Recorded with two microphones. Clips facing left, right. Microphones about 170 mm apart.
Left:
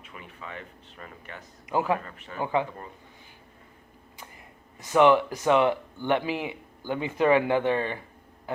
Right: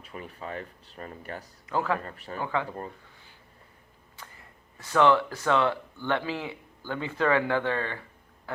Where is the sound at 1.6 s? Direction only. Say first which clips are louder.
Left 2 dB; 15° left (ahead or behind).